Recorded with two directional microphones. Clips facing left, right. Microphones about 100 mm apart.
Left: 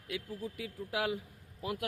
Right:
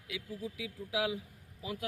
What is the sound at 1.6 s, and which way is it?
Speech, 60° left (ahead or behind).